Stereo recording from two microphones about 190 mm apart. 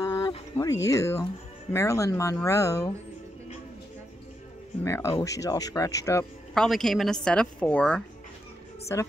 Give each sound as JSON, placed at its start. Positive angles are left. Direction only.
{"t": 0.0, "sound": "a sound", "side_deg": 20}
{"t": 1.7, "sound": "speech", "side_deg": 15}
{"t": 4.8, "sound": "speech", "side_deg": 15}
{"t": 6.5, "sound": "a woman's voice", "side_deg": 0}